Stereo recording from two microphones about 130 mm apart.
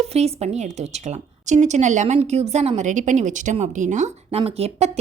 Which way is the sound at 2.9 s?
70° right (ahead or behind).